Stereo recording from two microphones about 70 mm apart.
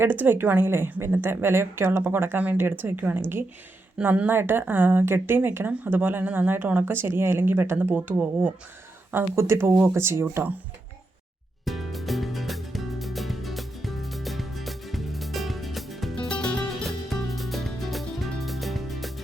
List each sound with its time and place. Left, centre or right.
0.0 s a woman's voice: right
4.0 s a woman's voice: right
9.3 s a woman's voice: right
11.6 s music: centre
16.3 s music: centre
17.1 s music: centre